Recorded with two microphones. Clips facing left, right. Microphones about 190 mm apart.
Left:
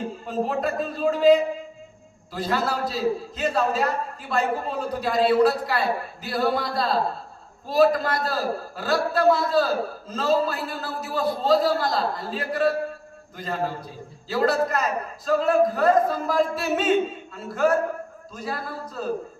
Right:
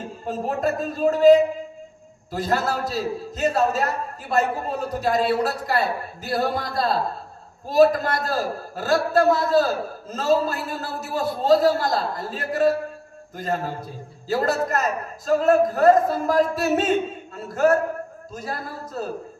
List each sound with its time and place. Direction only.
0.3 s a man's voice: 45° right (ahead or behind)